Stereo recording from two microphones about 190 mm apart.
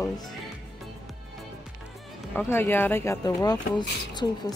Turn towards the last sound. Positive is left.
turn(degrees=20)  # may be behind; listen again after turning